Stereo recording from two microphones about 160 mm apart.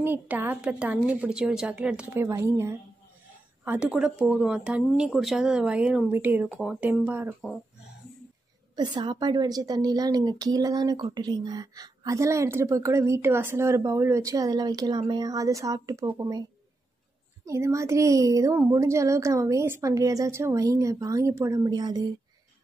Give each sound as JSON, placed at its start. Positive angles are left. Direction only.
{"t": 0.0, "sound": "speech", "side_deg": -15}
{"t": 8.7, "sound": "a woman's voice", "side_deg": -30}
{"t": 17.5, "sound": "a woman's voice", "side_deg": -20}